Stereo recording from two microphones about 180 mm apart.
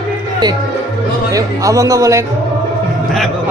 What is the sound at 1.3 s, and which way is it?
Chatter, 20° right (ahead or behind).